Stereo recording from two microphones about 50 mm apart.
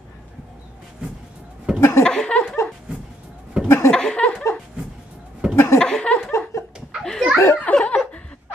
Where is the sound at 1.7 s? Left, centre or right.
Left.